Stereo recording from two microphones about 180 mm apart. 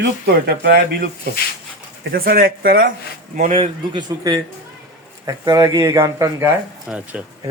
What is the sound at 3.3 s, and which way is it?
A man's voice, 35° right (ahead or behind).